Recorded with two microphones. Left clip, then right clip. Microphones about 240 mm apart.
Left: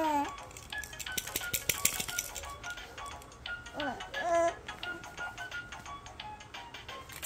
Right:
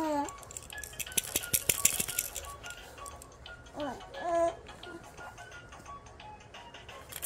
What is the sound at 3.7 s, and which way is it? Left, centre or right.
Music, left.